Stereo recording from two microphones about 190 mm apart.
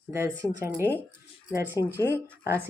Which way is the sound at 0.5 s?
15° right (ahead or behind).